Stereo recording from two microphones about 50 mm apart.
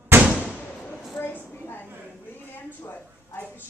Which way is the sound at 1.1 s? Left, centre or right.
Left.